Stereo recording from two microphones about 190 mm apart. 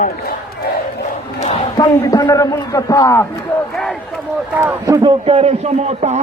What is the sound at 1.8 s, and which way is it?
A man's voice, 20° left (ahead or behind).